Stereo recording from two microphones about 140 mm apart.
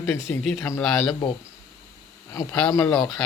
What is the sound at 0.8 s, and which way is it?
Speech, centre (ahead or behind).